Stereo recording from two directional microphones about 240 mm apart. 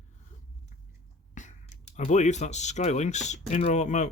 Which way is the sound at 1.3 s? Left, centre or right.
Left.